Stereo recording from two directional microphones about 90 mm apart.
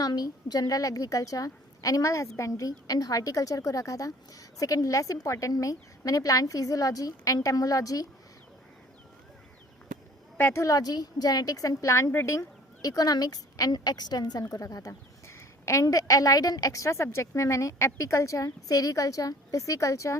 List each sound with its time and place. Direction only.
0.0 s a woman's voice: 45° left (ahead or behind)
10.3 s a woman's voice: 25° left (ahead or behind)